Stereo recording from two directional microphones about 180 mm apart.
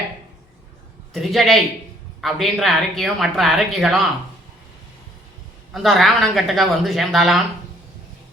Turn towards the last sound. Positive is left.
turn(degrees=0)  # may be behind; listen again after turning